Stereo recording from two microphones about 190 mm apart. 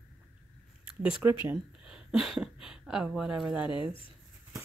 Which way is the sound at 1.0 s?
5° right (ahead or behind).